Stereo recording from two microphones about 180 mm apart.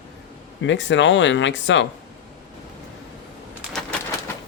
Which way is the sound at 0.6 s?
90° left.